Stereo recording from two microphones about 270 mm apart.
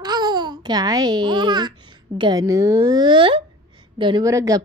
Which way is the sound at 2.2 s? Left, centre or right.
Centre.